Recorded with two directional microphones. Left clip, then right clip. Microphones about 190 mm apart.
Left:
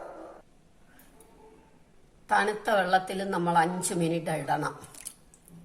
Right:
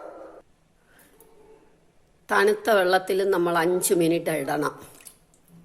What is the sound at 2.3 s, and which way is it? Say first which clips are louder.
A woman's voice: right 5 dB; 50° right (ahead or behind).